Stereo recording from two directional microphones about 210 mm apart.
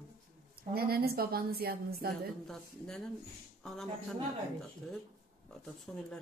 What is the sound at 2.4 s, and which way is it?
Speech, centre (ahead or behind).